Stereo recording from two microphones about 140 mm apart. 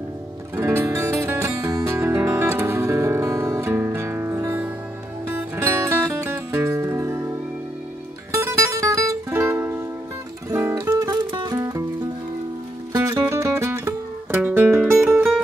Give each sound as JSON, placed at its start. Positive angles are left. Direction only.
{"t": 0.6, "sound": "music", "side_deg": -20}
{"t": 8.4, "sound": "music", "side_deg": -20}
{"t": 11.0, "sound": "music", "side_deg": -30}
{"t": 12.9, "sound": "music", "side_deg": -25}